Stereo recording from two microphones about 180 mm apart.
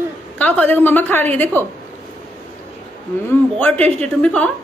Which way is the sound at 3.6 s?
5° left (ahead or behind).